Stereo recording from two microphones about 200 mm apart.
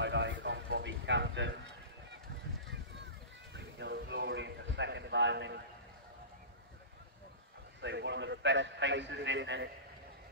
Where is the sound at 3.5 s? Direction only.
60° right (ahead or behind).